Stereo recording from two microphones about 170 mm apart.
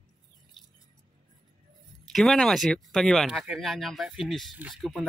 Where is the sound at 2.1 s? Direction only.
Centre (ahead or behind).